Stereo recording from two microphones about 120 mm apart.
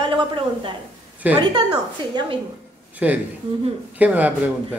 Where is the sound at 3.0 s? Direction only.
10° right (ahead or behind).